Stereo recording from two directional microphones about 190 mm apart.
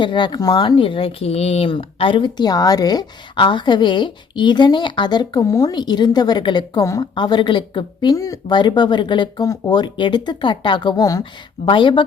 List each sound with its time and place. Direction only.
0.0 s speech: 25° left (ahead or behind)